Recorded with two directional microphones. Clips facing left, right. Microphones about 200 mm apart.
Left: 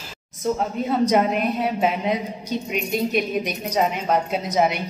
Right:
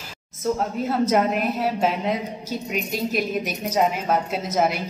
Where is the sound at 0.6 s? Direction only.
Centre (ahead or behind).